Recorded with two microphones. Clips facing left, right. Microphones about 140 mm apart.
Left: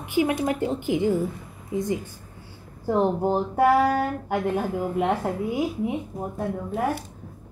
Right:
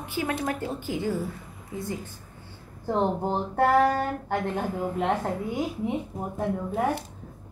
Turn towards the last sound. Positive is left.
turn(degrees=0)  # may be behind; listen again after turning